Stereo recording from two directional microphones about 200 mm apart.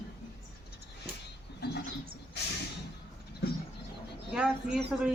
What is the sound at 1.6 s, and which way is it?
Bird, 55° left (ahead or behind).